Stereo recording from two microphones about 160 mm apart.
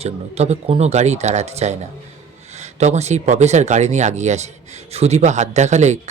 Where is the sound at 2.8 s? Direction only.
45° right (ahead or behind).